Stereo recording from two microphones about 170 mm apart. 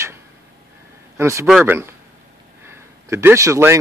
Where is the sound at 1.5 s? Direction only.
Centre (ahead or behind).